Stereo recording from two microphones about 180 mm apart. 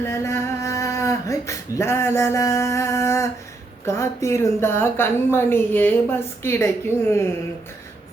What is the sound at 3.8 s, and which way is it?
A woman's voice, 15° left (ahead or behind).